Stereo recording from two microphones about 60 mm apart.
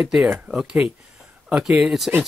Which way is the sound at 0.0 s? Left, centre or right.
Centre.